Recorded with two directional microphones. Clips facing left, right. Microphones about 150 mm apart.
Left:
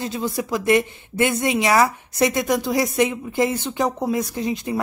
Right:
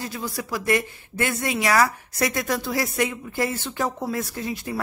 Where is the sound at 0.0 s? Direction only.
20° left (ahead or behind).